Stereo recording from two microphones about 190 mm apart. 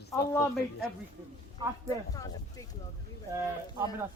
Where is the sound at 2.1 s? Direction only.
20° left (ahead or behind).